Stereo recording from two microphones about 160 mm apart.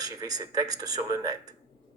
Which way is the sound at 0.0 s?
25° right (ahead or behind).